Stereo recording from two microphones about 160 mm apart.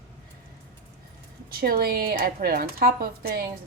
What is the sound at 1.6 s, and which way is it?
A woman's voice, 70° right (ahead or behind).